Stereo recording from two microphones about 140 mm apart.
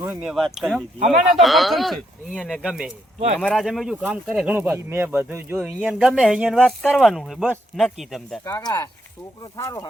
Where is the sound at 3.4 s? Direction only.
5° left (ahead or behind); by 5.7 s 15° right (ahead or behind).